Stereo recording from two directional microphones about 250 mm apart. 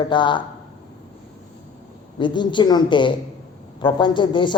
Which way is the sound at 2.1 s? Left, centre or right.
Centre.